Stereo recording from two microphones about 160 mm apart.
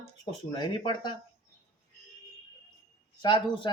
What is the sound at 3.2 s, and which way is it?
Speech, 30° left (ahead or behind).